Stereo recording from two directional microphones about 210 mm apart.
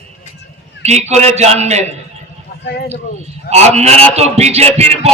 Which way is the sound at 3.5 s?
30° right (ahead or behind).